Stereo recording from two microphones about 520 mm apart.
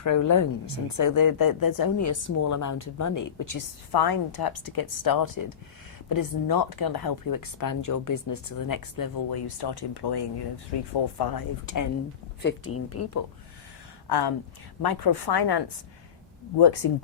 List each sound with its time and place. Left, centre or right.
0.0 s a woman's voice: left
12.4 s a woman's voice: left
14.1 s speech: left
16.8 s speech: left